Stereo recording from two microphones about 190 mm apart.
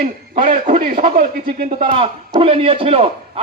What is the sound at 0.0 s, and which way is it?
A man's voice, 45° right (ahead or behind).